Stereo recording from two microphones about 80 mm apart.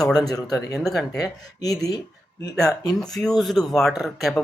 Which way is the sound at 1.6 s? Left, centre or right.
Left.